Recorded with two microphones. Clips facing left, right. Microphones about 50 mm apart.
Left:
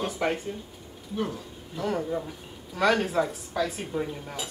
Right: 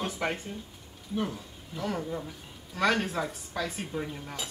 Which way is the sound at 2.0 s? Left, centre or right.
Centre.